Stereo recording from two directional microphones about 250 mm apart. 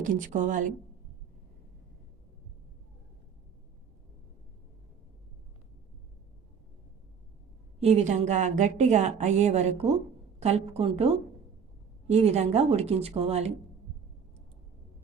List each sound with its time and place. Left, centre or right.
0.0 s a woman's voice: right
7.8 s a woman's voice: right